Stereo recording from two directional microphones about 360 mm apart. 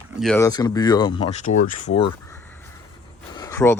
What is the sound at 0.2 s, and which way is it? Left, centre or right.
Speech, centre.